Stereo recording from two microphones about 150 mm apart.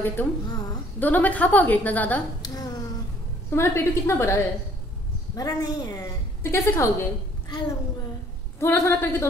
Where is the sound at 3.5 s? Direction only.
15° left (ahead or behind).